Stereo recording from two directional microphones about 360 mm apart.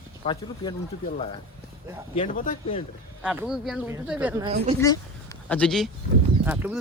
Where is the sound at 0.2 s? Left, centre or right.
Centre.